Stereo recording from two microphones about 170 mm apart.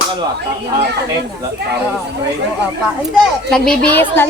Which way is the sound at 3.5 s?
5° left (ahead or behind).